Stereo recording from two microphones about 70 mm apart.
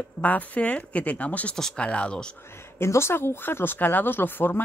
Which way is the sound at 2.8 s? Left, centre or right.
Left.